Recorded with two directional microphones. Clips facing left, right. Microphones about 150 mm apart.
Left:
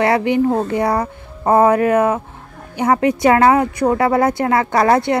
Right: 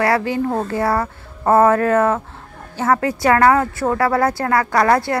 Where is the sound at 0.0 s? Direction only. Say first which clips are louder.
Left 3 dB; 20° left (ahead or behind).